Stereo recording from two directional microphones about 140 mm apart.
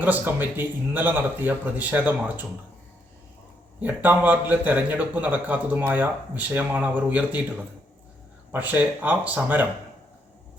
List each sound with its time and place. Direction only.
0.0 s a man's voice: 15° right (ahead or behind)
3.8 s a man's voice: 10° right (ahead or behind)